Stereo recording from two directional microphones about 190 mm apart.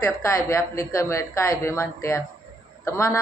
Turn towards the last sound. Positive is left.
turn(degrees=15)  # may be behind; listen again after turning